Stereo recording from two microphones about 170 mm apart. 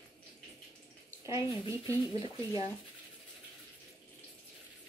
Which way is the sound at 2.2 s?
35° left (ahead or behind).